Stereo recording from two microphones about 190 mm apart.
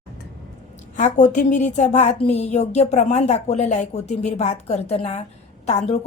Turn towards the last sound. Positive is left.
turn(degrees=35)  # may be behind; listen again after turning